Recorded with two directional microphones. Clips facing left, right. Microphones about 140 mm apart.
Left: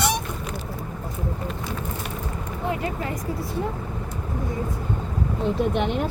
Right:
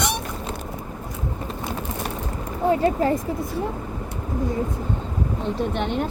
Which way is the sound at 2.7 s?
30° right (ahead or behind).